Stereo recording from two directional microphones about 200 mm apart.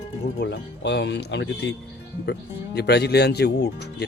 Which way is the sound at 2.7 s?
55° left (ahead or behind).